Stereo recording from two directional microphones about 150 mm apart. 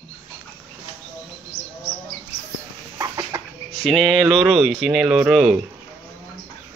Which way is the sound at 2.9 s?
20° right (ahead or behind).